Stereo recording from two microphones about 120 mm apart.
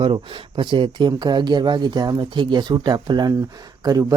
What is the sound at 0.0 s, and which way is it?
Speech, 45° right (ahead or behind).